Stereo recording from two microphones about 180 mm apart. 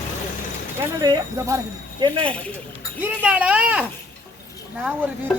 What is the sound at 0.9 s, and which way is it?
Speech, 20° right (ahead or behind).